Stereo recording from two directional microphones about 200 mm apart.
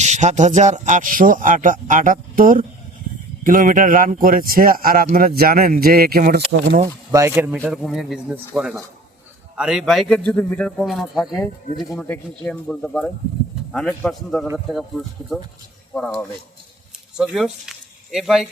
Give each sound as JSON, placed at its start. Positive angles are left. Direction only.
{"t": 0.0, "sound": "speech", "side_deg": -35}
{"t": 6.8, "sound": "speech", "side_deg": -15}
{"t": 15.9, "sound": "speech", "side_deg": 5}